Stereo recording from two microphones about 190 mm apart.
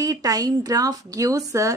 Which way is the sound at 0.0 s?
20° right (ahead or behind).